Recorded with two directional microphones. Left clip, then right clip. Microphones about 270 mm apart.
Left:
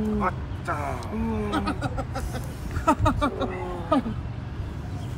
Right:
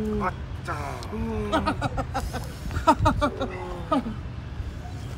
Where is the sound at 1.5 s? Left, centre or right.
Centre.